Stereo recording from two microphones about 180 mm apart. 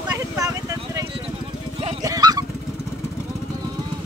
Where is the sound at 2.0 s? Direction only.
20° right (ahead or behind).